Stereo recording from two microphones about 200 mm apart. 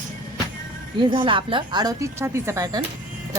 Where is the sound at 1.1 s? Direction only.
25° right (ahead or behind).